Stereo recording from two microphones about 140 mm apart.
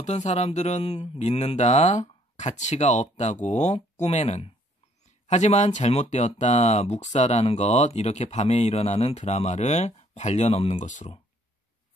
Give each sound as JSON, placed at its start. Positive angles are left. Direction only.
{"t": 0.0, "sound": "speech", "side_deg": 55}